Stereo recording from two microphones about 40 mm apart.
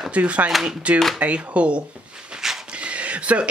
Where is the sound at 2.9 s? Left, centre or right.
Right.